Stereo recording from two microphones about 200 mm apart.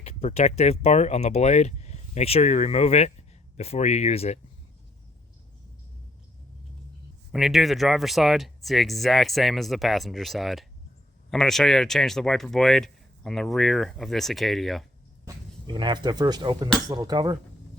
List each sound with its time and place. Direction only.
0.0 s speech: 30° left (ahead or behind)
7.3 s speech: centre (ahead or behind)
15.2 s speech: 20° right (ahead or behind)